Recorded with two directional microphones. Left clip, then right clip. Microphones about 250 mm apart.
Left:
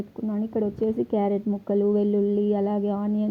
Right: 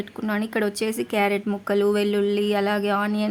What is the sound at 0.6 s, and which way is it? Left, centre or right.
Speech, centre.